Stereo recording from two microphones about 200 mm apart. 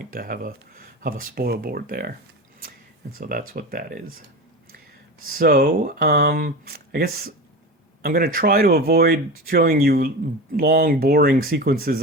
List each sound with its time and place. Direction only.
0.1 s speech: 45° right (ahead or behind)
3.2 s speech: 50° right (ahead or behind)
5.3 s speech: 45° right (ahead or behind)